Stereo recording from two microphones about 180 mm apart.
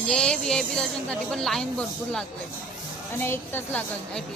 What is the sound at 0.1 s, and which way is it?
Speech, 5° left (ahead or behind).